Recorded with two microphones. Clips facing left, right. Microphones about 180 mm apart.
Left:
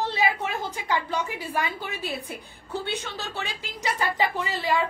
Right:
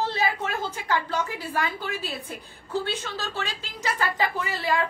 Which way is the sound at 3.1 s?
15° left (ahead or behind).